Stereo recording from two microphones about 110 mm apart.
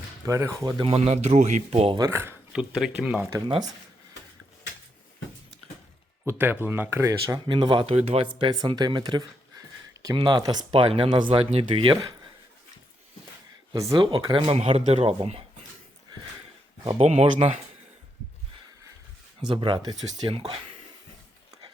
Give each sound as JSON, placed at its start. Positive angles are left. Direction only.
{"t": 0.3, "sound": "speech", "side_deg": -30}
{"t": 0.8, "sound": "speech", "side_deg": -65}
{"t": 2.0, "sound": "speech", "side_deg": -20}
{"t": 2.5, "sound": "speech", "side_deg": -5}
{"t": 6.2, "sound": "speech", "side_deg": -20}
{"t": 7.3, "sound": "speech", "side_deg": -45}
{"t": 7.9, "sound": "speech", "side_deg": -60}
{"t": 8.4, "sound": "speech", "side_deg": -45}
{"t": 10.7, "sound": "speech", "side_deg": -60}
{"t": 13.9, "sound": "speech", "side_deg": -45}
{"t": 14.3, "sound": "speech", "side_deg": -60}
{"t": 17.0, "sound": "speech", "side_deg": -70}
{"t": 19.5, "sound": "speech", "side_deg": -45}
{"t": 20.2, "sound": "speech", "side_deg": -60}